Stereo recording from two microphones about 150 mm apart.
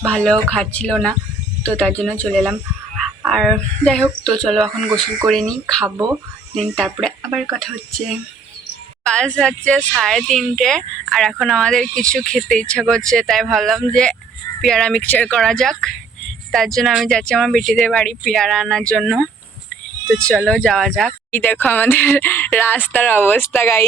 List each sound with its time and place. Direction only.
0.0 s speech: 5° left (ahead or behind)